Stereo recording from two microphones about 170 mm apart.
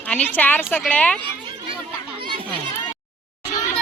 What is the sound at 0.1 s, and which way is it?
A woman's voice, 10° left (ahead or behind).